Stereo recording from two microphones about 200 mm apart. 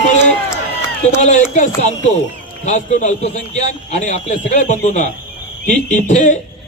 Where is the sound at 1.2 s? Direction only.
40° left (ahead or behind).